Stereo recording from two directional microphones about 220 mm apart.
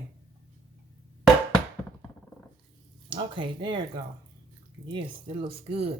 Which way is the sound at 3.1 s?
20° right (ahead or behind).